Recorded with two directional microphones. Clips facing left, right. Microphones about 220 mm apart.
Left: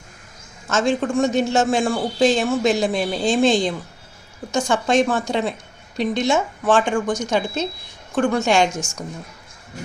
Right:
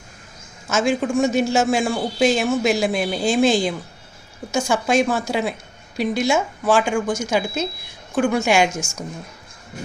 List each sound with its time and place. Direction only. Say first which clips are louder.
0.7 s a woman's voice: even; centre (ahead or behind)
6.7 s a woman's voice: even; 10° right (ahead or behind)
8.7 s a woman's voice: even; 15° left (ahead or behind)